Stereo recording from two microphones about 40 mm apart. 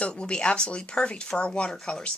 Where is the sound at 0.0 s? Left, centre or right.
Left.